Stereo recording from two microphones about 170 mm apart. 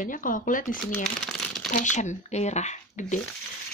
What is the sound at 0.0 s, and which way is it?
Speech, 50° left (ahead or behind).